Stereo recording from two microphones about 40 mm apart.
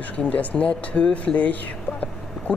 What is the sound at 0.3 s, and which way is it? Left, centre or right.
Speech, left.